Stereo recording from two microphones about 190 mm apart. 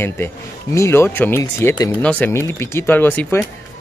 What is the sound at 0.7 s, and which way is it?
Speech, 15° left (ahead or behind).